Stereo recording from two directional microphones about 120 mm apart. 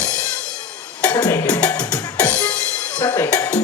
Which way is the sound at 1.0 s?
15° left (ahead or behind).